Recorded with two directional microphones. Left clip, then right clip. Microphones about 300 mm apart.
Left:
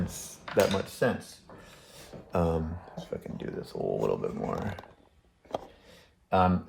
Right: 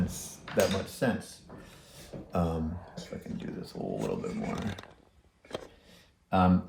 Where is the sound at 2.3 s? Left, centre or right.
Left.